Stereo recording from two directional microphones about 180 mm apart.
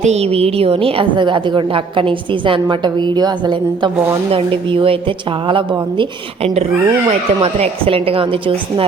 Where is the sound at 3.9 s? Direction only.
10° right (ahead or behind).